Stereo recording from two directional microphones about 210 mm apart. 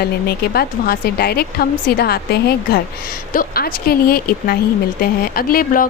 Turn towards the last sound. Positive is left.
turn(degrees=40)  # may be behind; listen again after turning